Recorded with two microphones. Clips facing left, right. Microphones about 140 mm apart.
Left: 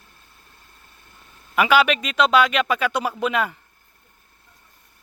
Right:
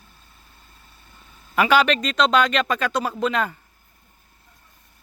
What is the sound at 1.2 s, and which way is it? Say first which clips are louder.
A man's voice: even; 5° left (ahead or behind).